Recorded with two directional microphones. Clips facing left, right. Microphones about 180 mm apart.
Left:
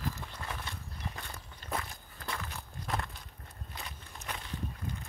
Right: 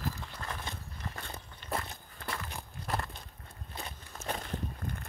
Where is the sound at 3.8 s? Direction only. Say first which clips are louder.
Right 6 dB; 30° right (ahead or behind).